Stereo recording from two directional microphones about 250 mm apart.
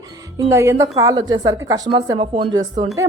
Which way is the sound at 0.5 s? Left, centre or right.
Centre.